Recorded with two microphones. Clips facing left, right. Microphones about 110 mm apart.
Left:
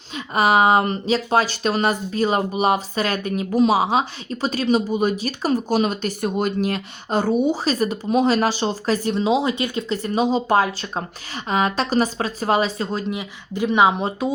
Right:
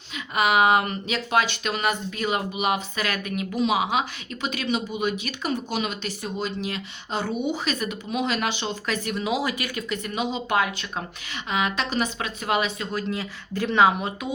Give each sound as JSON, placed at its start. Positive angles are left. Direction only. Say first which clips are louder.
{"t": 0.3, "sound": "speech", "louder": "left 4 dB", "side_deg": 35}
{"t": 13.1, "sound": "speech", "louder": "left 2 dB", "side_deg": 15}
{"t": 14.0, "sound": "speech", "louder": "left 7 dB", "side_deg": 35}